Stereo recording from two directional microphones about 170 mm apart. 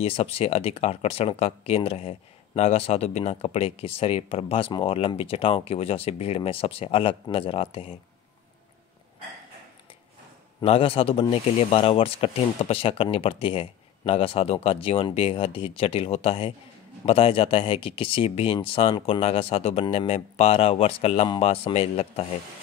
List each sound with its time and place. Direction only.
0.0 s speech: 35° left (ahead or behind)
10.6 s speech: 35° left (ahead or behind)